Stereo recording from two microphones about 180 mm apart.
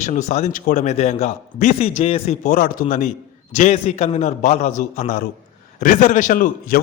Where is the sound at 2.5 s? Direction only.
50° left (ahead or behind).